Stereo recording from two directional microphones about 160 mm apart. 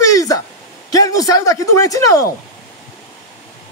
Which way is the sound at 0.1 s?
20° left (ahead or behind).